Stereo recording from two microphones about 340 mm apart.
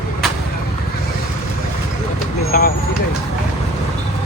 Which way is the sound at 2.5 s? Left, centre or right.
Left.